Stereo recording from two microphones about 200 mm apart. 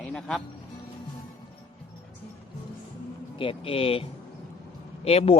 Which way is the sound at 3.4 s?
25° left (ahead or behind).